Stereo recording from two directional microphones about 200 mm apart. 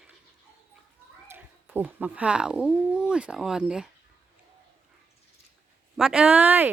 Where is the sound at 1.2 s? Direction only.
10° right (ahead or behind).